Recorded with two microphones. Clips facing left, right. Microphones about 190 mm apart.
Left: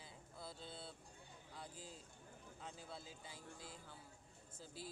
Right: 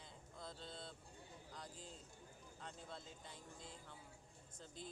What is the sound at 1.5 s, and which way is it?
Speech, 5° left (ahead or behind).